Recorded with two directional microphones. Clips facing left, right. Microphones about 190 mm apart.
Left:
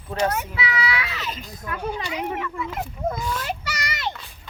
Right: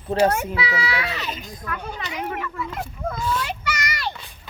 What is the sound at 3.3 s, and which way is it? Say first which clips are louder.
Child singing: right 2 dB; 40° left (ahead or behind).